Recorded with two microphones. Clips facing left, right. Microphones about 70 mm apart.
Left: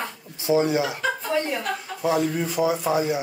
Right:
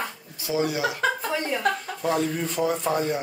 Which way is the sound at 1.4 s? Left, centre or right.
Centre.